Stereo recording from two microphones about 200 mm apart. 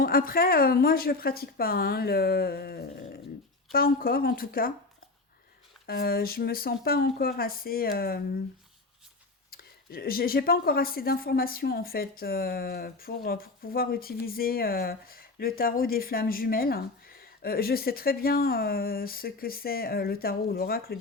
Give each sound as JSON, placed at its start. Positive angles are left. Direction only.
{"t": 0.0, "sound": "speech", "side_deg": 45}
{"t": 5.8, "sound": "speech", "side_deg": 50}
{"t": 9.5, "sound": "speech", "side_deg": 50}